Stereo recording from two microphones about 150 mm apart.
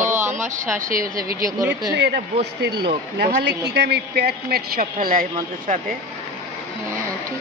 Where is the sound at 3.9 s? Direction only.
90° right.